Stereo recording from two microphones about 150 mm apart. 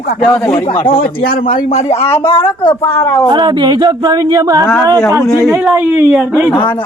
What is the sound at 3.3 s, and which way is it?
Speech, 30° right (ahead or behind).